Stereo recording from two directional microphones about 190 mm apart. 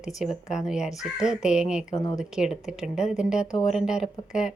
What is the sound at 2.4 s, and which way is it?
Speech, 5° right (ahead or behind).